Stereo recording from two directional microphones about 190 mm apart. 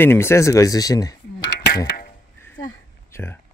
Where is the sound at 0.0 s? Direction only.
10° left (ahead or behind).